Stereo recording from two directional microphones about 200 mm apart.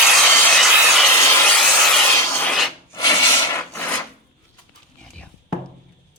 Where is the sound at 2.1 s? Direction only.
10° left (ahead or behind).